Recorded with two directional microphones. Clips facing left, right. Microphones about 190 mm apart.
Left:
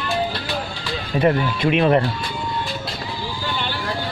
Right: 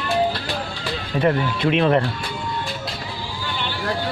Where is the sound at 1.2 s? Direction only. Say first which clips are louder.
Left 2 dB; 10° left (ahead or behind).